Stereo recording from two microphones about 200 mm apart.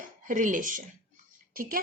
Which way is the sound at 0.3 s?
40° right (ahead or behind).